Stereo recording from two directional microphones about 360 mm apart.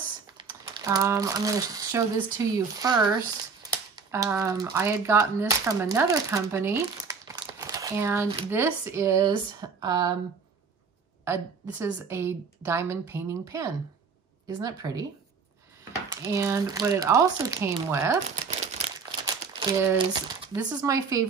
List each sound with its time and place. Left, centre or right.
0.4 s speech: centre
11.2 s a woman's voice: centre
16.1 s a woman's voice: centre
18.3 s a sound: centre
19.9 s a woman's voice: centre